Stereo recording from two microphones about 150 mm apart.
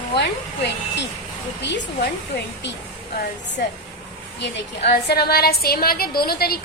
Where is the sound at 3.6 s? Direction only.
90° left.